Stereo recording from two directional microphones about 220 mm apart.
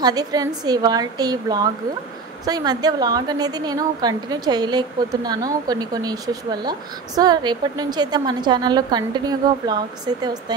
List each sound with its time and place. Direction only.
0.0 s a woman's voice: 15° right (ahead or behind)